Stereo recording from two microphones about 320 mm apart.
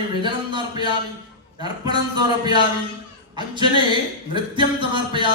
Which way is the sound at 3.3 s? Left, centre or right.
Centre.